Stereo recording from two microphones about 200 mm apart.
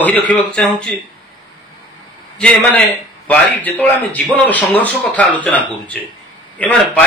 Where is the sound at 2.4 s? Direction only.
5° left (ahead or behind).